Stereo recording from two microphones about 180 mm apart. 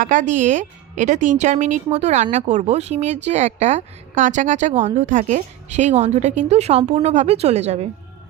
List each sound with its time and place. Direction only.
0.0 s speech: 45° right (ahead or behind)